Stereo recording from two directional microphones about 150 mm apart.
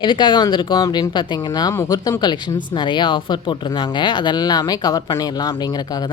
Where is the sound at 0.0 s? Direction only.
30° left (ahead or behind).